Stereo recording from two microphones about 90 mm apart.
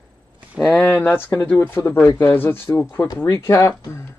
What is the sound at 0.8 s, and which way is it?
Speech, 15° left (ahead or behind).